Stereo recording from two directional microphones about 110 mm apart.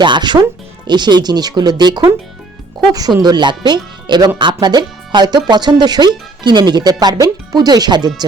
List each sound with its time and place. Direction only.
0.0 s speech: 45° right (ahead or behind)